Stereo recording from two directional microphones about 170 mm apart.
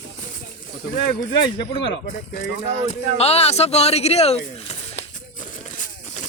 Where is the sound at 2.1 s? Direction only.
50° left (ahead or behind).